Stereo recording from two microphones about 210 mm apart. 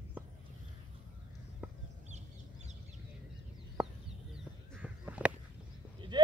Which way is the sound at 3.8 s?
5° right (ahead or behind).